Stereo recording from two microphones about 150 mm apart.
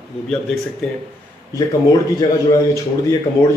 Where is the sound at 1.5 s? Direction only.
25° left (ahead or behind).